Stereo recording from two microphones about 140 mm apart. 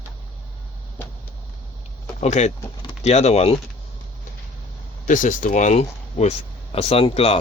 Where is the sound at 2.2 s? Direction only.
55° left (ahead or behind).